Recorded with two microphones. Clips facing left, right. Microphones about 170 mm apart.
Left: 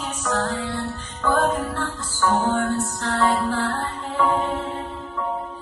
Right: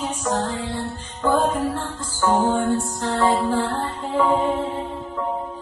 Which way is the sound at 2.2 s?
20° right (ahead or behind).